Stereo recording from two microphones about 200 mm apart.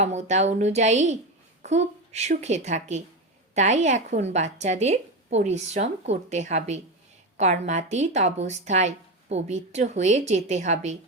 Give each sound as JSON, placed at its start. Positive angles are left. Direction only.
{"t": 0.0, "sound": "speech", "side_deg": -35}